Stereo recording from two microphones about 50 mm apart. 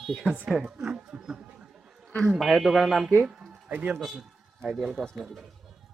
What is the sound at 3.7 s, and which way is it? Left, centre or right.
Speech, right.